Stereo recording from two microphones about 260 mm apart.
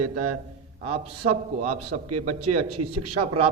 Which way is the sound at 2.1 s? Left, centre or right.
Right.